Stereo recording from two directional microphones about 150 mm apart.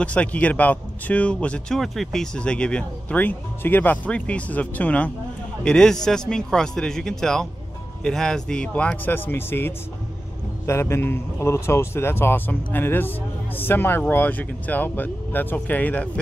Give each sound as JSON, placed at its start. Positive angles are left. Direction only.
{"t": 0.0, "sound": "speech", "side_deg": 10}